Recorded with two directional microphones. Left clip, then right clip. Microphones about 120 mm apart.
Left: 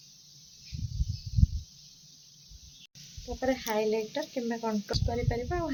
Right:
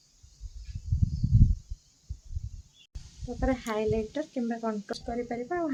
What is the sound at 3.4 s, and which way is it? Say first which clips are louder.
Speech: left 1 dB; 30° right (ahead or behind).